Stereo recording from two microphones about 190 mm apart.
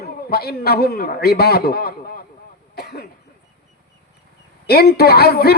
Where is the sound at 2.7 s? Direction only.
55° left (ahead or behind).